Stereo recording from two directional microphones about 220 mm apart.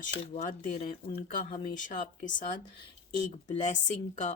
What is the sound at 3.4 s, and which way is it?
Speech, 35° left (ahead or behind).